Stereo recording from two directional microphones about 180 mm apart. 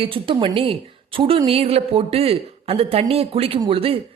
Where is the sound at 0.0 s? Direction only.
30° right (ahead or behind).